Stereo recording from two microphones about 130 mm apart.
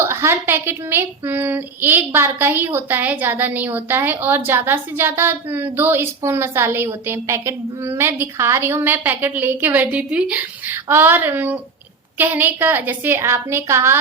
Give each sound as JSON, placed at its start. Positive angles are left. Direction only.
{"t": 0.0, "sound": "a woman's voice", "side_deg": -20}